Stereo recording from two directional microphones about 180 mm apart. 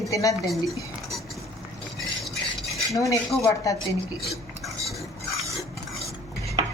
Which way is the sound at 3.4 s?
20° left (ahead or behind).